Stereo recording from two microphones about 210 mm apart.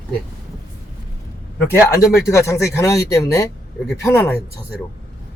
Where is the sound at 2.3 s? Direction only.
15° left (ahead or behind).